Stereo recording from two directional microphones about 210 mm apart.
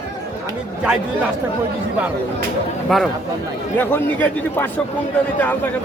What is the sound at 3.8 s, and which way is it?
Speech, 10° left (ahead or behind).